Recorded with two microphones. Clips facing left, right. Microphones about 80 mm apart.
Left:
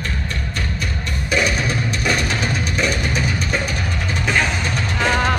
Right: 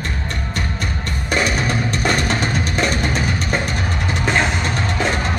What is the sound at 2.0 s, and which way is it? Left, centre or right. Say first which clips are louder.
Music: right 2 dB; right.